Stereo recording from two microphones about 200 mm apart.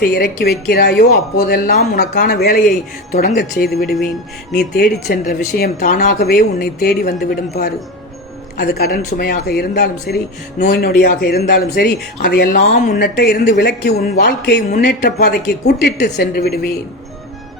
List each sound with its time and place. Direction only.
0.0 s speech: 55° left (ahead or behind)
3.8 s speech: centre (ahead or behind)
4.5 s speech: 55° left (ahead or behind)